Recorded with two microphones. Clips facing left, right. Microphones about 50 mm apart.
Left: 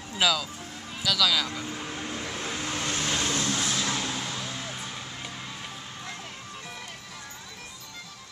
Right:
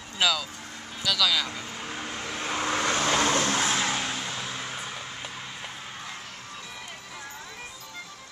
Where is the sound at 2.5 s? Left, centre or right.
Right.